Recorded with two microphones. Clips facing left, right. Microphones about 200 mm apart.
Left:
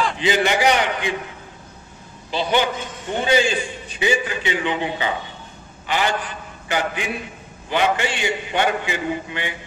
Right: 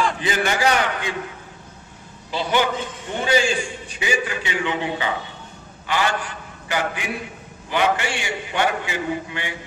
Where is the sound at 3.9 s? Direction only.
25° left (ahead or behind).